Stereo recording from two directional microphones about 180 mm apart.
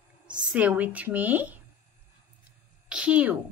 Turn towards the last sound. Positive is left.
turn(degrees=-5)  # may be behind; listen again after turning